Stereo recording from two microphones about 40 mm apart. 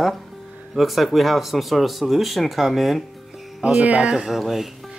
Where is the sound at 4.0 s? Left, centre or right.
Right.